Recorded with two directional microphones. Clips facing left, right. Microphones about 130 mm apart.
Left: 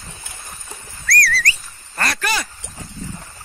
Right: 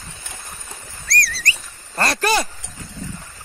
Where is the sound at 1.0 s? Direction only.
20° right (ahead or behind).